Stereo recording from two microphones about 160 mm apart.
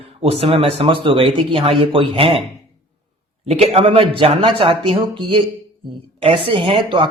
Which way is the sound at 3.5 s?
40° right (ahead or behind).